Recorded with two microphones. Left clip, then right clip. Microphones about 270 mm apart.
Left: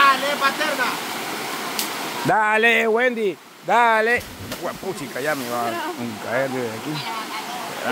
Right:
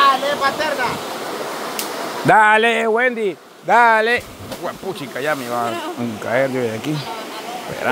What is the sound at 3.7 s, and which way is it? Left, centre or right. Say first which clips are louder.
Speech: right 4 dB; centre.